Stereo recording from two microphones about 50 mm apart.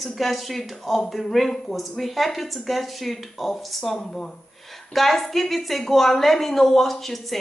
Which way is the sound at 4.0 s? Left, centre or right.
Centre.